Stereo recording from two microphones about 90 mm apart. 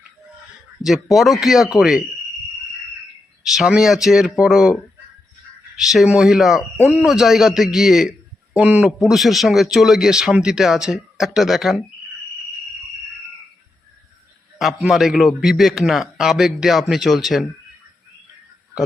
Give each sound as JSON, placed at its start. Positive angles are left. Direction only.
{"t": 0.9, "sound": "a man's voice", "side_deg": 0}
{"t": 3.4, "sound": "a man's voice", "side_deg": -5}
{"t": 5.7, "sound": "a man's voice", "side_deg": -5}
{"t": 14.8, "sound": "a man's voice", "side_deg": -5}